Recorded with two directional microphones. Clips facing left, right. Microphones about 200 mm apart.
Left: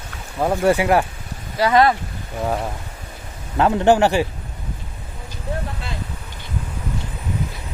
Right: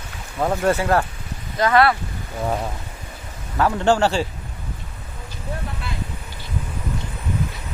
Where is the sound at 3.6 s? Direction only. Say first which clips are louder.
Left 3 dB; 20° left (ahead or behind).